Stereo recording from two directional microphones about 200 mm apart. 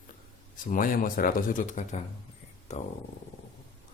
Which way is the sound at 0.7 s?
45° left (ahead or behind).